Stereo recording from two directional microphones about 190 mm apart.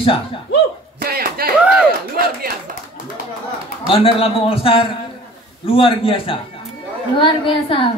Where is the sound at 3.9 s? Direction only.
30° left (ahead or behind).